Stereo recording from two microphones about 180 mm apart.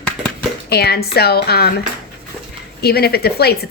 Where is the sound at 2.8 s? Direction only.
60° left (ahead or behind).